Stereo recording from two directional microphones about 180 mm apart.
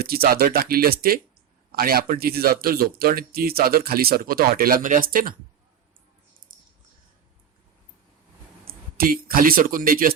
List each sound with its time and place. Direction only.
0.0 s speech: 55° right (ahead or behind)
6.5 s a sound: 50° right (ahead or behind)
8.6 s speech: 55° right (ahead or behind)